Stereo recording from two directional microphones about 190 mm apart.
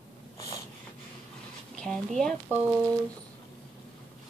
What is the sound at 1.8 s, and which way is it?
Speech, 5° left (ahead or behind).